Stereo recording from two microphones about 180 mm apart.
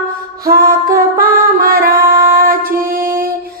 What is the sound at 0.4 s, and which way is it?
Music, 55° right (ahead or behind).